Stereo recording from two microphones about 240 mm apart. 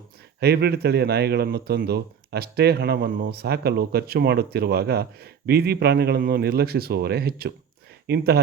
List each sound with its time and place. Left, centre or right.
0.3 s speech: right